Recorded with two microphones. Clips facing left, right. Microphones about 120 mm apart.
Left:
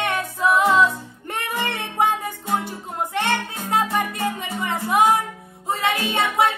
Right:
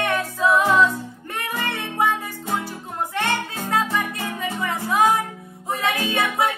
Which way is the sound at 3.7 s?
25° left (ahead or behind).